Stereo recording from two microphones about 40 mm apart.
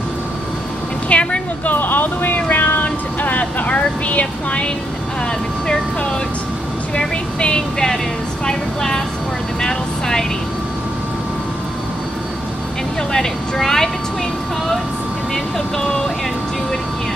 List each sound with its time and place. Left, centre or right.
1.0 s vehicle: left
1.7 s vehicle: left
7.0 s vehicle: left
8.5 s a woman's voice: centre
9.6 s vehicle: centre
13.6 s a woman's voice: centre
15.3 s speech: centre